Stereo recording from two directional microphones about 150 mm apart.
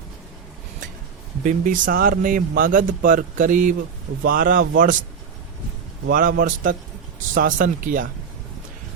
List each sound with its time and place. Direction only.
1.5 s speech: 60° right (ahead or behind)
6.1 s speech: 75° right (ahead or behind)